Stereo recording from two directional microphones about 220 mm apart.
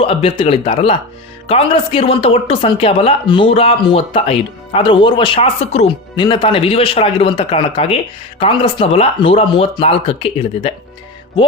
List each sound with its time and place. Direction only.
0.0 s speech: 25° left (ahead or behind)